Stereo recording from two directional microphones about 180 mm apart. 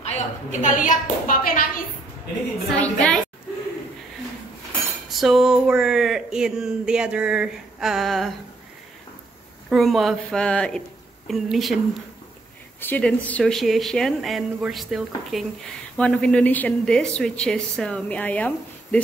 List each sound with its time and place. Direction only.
0.0 s speech: 40° left (ahead or behind)
2.8 s a woman's voice: 5° left (ahead or behind)
4.7 s a sound: centre (ahead or behind)
9.7 s a woman's voice: centre (ahead or behind)
12.8 s a woman's voice: 10° left (ahead or behind)